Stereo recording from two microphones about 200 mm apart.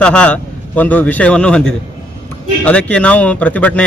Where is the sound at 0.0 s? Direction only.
5° left (ahead or behind).